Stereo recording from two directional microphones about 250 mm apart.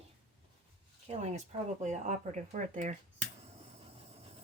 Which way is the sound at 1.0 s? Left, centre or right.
Right.